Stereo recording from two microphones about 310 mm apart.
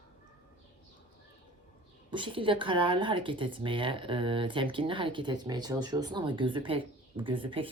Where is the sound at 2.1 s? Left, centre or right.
Centre.